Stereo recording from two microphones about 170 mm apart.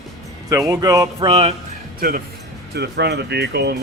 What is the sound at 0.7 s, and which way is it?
Speech, 20° right (ahead or behind).